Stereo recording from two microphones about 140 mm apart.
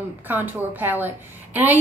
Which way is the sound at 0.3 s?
15° right (ahead or behind).